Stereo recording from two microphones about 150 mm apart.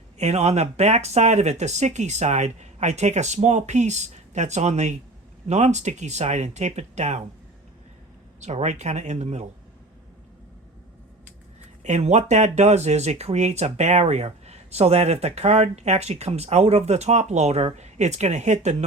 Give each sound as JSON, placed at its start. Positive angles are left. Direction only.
{"t": 0.2, "sound": "speech", "side_deg": -45}
{"t": 8.4, "sound": "speech", "side_deg": -50}
{"t": 11.8, "sound": "speech", "side_deg": -50}